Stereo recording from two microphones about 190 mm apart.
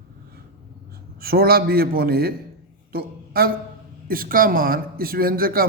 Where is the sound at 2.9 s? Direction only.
50° right (ahead or behind).